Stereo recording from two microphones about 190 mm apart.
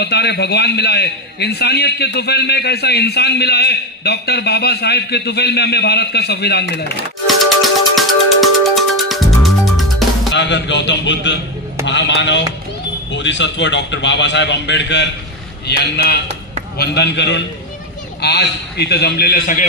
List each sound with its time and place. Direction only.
0.0 s a man's voice: 60° left (ahead or behind)
7.2 s music: centre (ahead or behind)
10.3 s a man's voice: 70° left (ahead or behind); by 19.6 s 50° left (ahead or behind)